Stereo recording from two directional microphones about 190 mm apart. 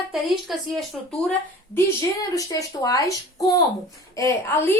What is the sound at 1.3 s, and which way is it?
A woman's voice, 15° left (ahead or behind).